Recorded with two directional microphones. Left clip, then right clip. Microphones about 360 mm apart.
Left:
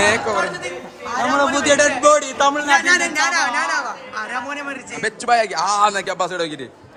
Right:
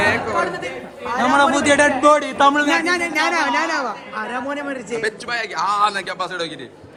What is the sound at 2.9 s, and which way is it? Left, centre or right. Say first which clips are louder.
A man's voice: left 2 dB; centre.